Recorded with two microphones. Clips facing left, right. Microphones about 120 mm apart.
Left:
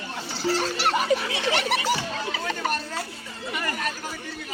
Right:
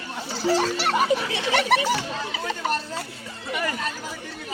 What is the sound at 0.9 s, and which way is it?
Speech, 15° right (ahead or behind).